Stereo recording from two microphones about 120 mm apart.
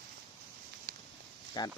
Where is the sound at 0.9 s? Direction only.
90° right.